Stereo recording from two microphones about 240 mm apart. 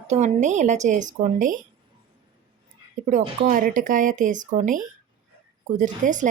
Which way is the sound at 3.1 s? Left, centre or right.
Right.